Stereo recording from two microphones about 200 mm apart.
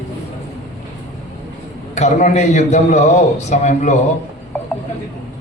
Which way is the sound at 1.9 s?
35° left (ahead or behind).